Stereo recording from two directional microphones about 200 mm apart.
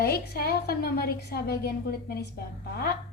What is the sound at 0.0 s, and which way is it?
Speech, 50° left (ahead or behind).